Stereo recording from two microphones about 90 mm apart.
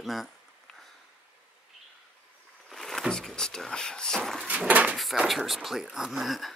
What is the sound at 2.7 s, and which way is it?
Speech, 5° left (ahead or behind).